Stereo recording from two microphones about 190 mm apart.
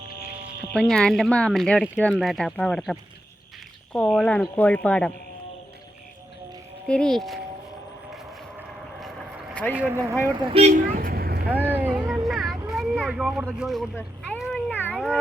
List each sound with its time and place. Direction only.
0.7 s speech: 5° left (ahead or behind)
6.8 s speech: 5° left (ahead or behind)
8.1 s vehicle: centre (ahead or behind)
9.7 s speech: 10° right (ahead or behind)
10.2 s speech: 30° right (ahead or behind)
10.8 s vehicle: 50° right (ahead or behind)
11.7 s vehicle: 10° right (ahead or behind)
14.7 s cat: 10° left (ahead or behind)
14.9 s cat: 5° right (ahead or behind)